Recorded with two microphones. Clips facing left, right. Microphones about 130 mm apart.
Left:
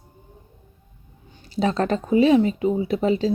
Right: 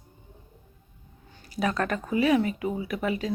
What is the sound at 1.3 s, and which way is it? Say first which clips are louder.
Speech: left 5 dB; 25° left (ahead or behind).